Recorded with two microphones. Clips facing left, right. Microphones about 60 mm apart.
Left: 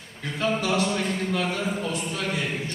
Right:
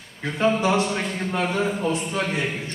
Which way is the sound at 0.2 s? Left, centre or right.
Right.